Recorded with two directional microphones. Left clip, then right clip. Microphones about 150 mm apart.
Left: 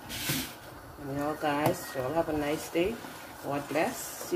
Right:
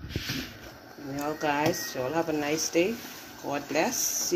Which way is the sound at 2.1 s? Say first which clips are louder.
Right 2 dB; 40° right (ahead or behind).